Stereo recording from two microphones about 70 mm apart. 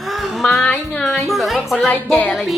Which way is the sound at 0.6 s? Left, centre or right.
Left.